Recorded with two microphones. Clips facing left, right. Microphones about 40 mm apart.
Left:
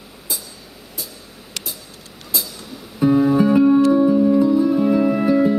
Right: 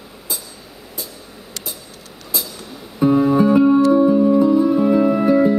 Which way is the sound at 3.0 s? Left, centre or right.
Centre.